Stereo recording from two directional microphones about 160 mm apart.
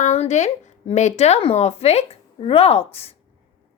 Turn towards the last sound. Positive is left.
turn(degrees=35)  # may be behind; listen again after turning